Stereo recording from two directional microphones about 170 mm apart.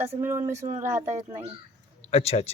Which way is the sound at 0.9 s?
45° right (ahead or behind).